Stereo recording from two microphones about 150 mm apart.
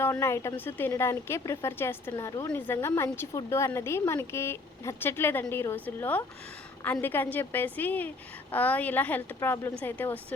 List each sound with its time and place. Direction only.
0.0 s a woman's voice: 20° left (ahead or behind)